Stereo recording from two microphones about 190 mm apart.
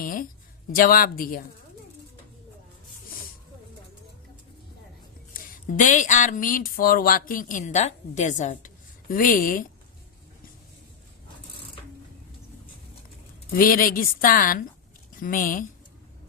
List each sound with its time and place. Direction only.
0.0 s a sound: 45° left (ahead or behind)
0.8 s speech: 50° left (ahead or behind)
5.3 s speech: 45° left (ahead or behind)
13.6 s speech: 50° left (ahead or behind)